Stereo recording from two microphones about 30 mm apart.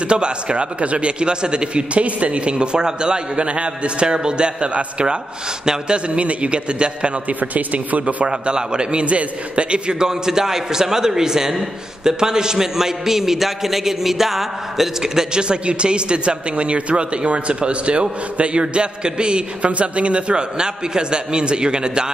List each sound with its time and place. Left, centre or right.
0.1 s a man's voice: right
6.0 s a man's voice: right
7.2 s a man's voice: right
8.3 s a man's voice: right
9.0 s a man's voice: right
10.0 s a man's voice: centre
15.3 s a man's voice: right